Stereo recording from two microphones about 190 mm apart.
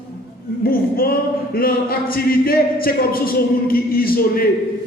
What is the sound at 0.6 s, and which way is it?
Speech, 50° left (ahead or behind).